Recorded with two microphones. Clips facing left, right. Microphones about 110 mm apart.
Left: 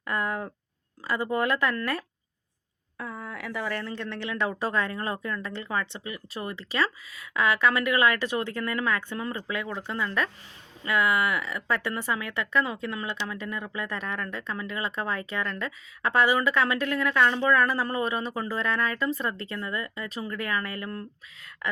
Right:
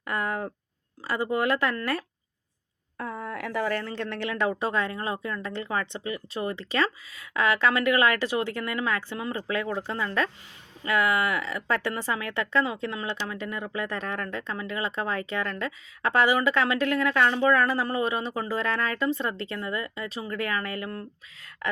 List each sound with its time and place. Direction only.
0.0 s a sound: 25° right (ahead or behind)
1.0 s a woman's voice: 25° right (ahead or behind)
3.7 s a woman's voice: 45° right (ahead or behind)
4.2 s a woman's voice: 20° right (ahead or behind)
13.8 s a woman's voice: 35° right (ahead or behind)